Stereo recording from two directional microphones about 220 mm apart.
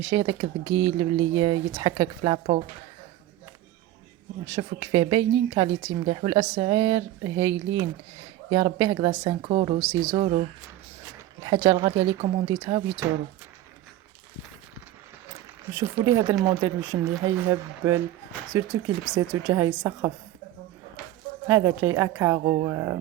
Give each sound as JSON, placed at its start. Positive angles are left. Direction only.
{"t": 0.0, "sound": "speech", "side_deg": -20}
{"t": 4.4, "sound": "speech", "side_deg": -20}
{"t": 11.4, "sound": "speech", "side_deg": -20}
{"t": 15.7, "sound": "speech", "side_deg": -10}
{"t": 19.1, "sound": "speech", "side_deg": -10}
{"t": 21.4, "sound": "speech", "side_deg": -10}
{"t": 22.4, "sound": "speech", "side_deg": -25}
{"t": 22.7, "sound": "speech", "side_deg": -15}